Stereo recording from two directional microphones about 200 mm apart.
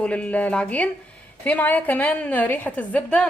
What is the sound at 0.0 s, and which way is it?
A woman's voice, 5° left (ahead or behind).